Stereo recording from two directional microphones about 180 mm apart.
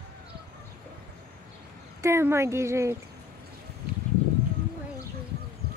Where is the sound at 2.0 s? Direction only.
15° right (ahead or behind).